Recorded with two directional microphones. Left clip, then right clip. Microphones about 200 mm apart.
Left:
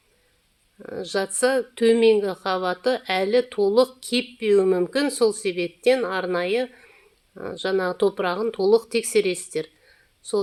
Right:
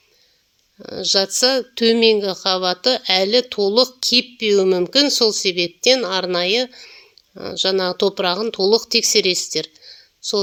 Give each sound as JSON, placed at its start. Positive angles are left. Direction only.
{"t": 0.8, "sound": "speech", "side_deg": -35}